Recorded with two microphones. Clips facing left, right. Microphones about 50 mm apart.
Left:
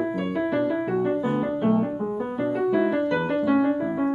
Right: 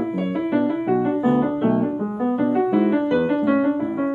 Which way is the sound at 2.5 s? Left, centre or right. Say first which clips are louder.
Right 2 dB; right.